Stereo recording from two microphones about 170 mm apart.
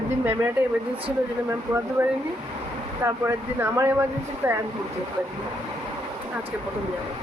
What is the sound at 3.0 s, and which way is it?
Speech, 15° right (ahead or behind).